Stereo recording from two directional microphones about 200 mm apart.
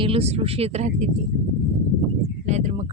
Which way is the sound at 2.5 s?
35° right (ahead or behind).